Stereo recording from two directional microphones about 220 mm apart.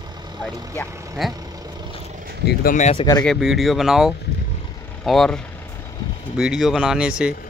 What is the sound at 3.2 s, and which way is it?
Speech, centre (ahead or behind).